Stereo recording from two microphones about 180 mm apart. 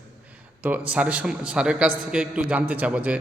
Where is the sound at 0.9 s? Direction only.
5° right (ahead or behind).